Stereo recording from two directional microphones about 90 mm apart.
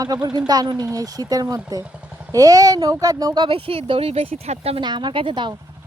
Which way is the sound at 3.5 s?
85° right.